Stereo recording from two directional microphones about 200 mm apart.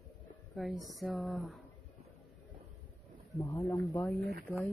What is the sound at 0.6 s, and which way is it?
Speech, centre (ahead or behind).